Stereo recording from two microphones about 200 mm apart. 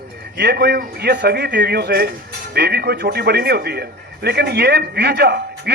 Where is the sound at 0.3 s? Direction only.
55° right (ahead or behind).